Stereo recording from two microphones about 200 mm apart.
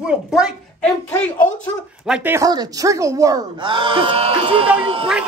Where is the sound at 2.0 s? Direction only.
5° right (ahead or behind); by 4.6 s 25° right (ahead or behind).